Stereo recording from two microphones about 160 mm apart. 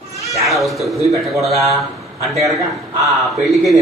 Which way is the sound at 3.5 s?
Centre (ahead or behind).